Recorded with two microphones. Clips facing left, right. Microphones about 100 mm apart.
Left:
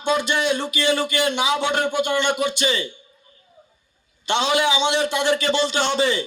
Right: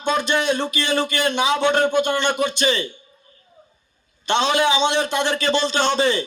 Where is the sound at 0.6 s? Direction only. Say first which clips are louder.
Even; 15° left (ahead or behind).